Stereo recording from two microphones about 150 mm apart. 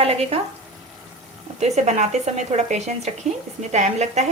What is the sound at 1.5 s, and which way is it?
A woman's voice, 50° right (ahead or behind).